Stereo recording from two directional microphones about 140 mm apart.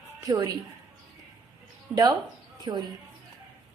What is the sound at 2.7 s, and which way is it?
Speech, 25° right (ahead or behind).